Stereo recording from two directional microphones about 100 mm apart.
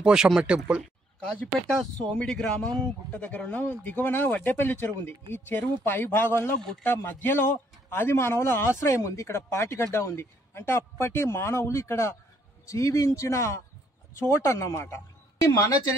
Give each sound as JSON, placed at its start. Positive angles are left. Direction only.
{"t": 0.0, "sound": "speech", "side_deg": -5}
{"t": 1.7, "sound": "a man's voice", "side_deg": 5}